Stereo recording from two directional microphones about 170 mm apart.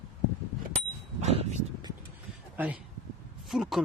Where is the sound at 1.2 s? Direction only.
40° right (ahead or behind).